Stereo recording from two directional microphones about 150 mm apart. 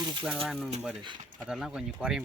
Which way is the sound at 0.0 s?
30° right (ahead or behind).